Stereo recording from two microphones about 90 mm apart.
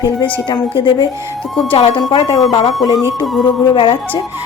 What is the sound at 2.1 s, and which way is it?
Speech, 50° left (ahead or behind).